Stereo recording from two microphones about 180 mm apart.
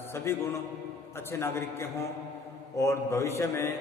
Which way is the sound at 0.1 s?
15° left (ahead or behind).